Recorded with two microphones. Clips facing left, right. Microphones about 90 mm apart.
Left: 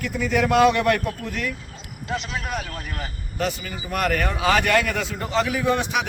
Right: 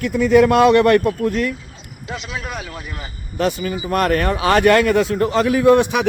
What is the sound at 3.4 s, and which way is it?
A man's voice, 45° right (ahead or behind).